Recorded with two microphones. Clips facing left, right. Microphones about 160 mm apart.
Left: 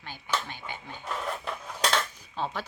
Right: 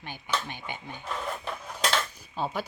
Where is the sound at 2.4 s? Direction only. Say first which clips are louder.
Right 2 dB; 10° right (ahead or behind).